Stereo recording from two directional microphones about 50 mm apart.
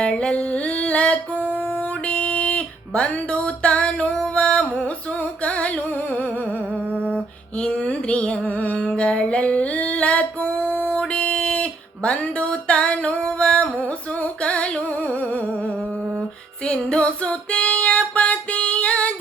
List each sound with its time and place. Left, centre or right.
0.0 s singing: left
2.0 s music: left
5.4 s singing: left
7.6 s music: centre; by 10.9 s left
10.9 s a sound: left
14.4 s music: left
16.6 s female singing: left